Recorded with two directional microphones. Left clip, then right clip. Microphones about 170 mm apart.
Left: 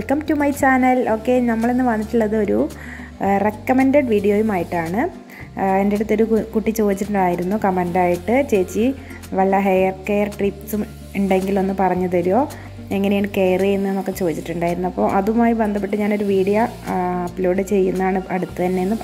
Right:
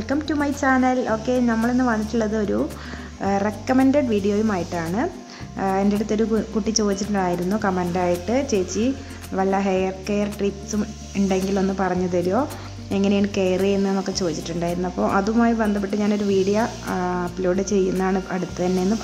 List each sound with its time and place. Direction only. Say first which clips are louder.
0.3 s a woman's voice: left 4 dB; 25° left (ahead or behind)
17.6 s a woman's voice: left 3 dB; 5° left (ahead or behind)